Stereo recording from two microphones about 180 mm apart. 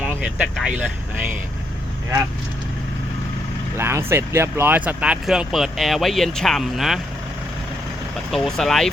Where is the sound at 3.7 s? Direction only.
15° right (ahead or behind).